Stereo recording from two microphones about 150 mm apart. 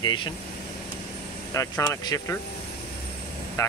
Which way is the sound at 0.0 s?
30° left (ahead or behind).